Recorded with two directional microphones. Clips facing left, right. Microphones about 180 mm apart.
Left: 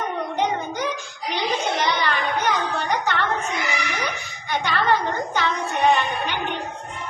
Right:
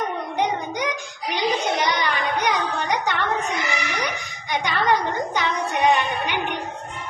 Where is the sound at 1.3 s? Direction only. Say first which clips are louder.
Right 1 dB; 15° right (ahead or behind).